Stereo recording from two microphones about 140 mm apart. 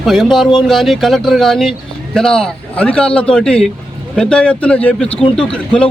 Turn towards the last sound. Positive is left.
turn(degrees=5)  # may be behind; listen again after turning